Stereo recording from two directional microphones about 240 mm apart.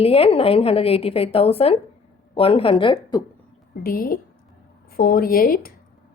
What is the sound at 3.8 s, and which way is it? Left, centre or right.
A woman's voice, left.